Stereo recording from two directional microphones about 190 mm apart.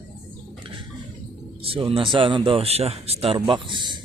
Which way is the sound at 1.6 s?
30° right (ahead or behind).